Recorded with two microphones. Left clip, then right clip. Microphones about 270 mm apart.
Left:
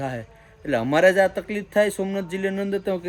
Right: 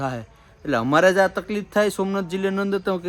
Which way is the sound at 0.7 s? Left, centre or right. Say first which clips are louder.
Right 1 dB; centre.